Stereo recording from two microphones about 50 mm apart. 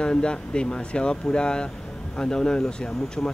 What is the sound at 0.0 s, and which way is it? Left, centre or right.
Speech, centre.